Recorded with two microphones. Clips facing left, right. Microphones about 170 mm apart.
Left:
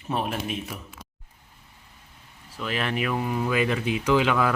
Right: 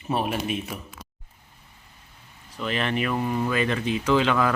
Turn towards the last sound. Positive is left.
turn(degrees=5)  # may be behind; listen again after turning